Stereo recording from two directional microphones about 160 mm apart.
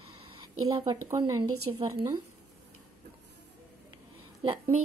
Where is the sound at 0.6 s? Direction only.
25° right (ahead or behind).